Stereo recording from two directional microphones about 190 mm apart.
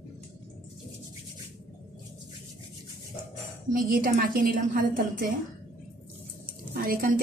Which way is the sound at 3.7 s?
45° right (ahead or behind).